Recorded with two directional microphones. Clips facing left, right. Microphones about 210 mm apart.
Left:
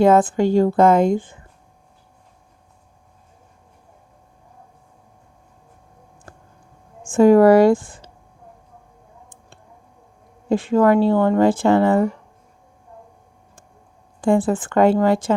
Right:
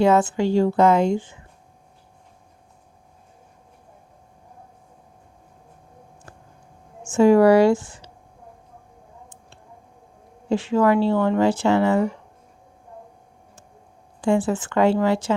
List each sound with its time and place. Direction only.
0.0 s speech: 50° left (ahead or behind)
6.3 s a sound: 50° left (ahead or behind)
7.1 s speech: 50° left (ahead or behind)
10.5 s speech: 50° left (ahead or behind)
14.2 s speech: 55° left (ahead or behind)